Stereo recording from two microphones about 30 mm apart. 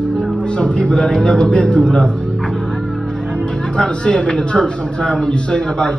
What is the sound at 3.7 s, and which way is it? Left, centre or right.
A man's voice, left.